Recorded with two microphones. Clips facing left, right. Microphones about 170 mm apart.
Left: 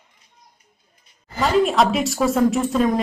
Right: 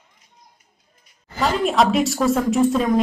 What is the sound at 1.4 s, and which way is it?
A woman's voice, centre (ahead or behind).